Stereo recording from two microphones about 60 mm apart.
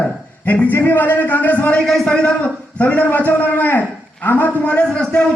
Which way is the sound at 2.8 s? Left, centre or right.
Left.